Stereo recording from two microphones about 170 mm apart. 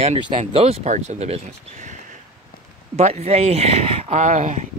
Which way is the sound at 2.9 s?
40° right (ahead or behind).